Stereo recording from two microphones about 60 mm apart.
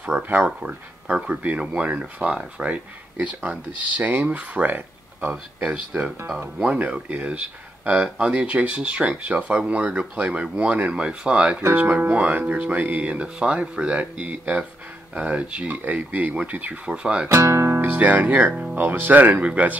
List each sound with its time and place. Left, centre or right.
0.0 s speech: right
0.5 s speech: centre
5.6 s speech: centre
17.3 s speech: right
17.8 s speech: right